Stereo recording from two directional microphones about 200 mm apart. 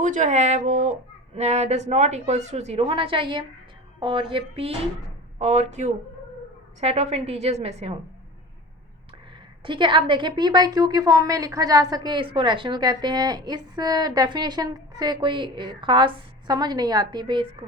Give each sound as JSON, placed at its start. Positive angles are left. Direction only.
{"t": 0.0, "sound": "a woman's voice", "side_deg": -40}
{"t": 9.6, "sound": "a woman's voice", "side_deg": -25}